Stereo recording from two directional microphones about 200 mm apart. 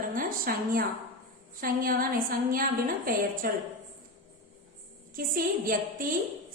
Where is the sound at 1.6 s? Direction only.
45° right (ahead or behind).